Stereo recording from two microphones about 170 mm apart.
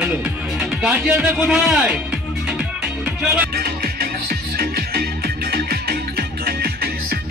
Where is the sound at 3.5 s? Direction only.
60° right (ahead or behind).